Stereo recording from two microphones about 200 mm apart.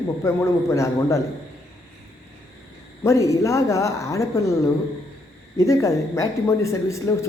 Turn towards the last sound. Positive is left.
turn(degrees=15)  # may be behind; listen again after turning